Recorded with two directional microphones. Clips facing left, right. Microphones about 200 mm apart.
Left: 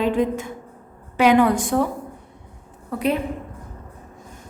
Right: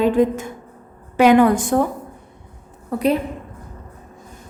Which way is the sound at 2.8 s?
40° right (ahead or behind).